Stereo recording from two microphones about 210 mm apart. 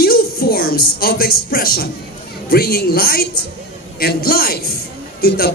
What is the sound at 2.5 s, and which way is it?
A man's voice, 45° left (ahead or behind).